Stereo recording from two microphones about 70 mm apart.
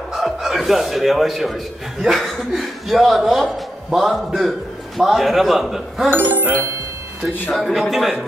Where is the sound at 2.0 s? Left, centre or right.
Centre.